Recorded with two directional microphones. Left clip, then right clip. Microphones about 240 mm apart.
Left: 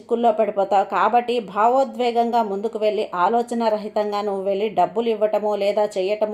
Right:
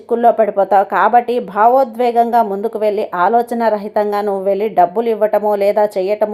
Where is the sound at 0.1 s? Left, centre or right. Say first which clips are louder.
Right 7 dB; right.